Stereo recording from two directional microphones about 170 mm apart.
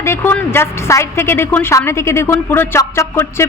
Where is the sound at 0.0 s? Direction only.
15° left (ahead or behind).